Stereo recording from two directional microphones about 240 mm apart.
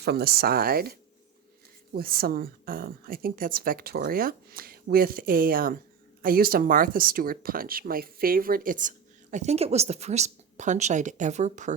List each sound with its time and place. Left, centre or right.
0.0 s speech: right